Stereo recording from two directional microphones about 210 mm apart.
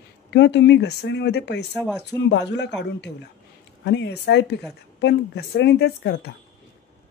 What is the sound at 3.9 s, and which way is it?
A woman's voice, 55° left (ahead or behind).